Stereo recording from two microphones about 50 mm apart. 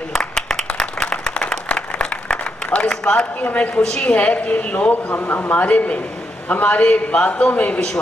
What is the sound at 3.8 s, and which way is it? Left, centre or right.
A man's voice, left.